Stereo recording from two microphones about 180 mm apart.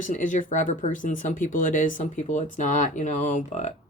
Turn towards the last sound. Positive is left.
turn(degrees=40)  # may be behind; listen again after turning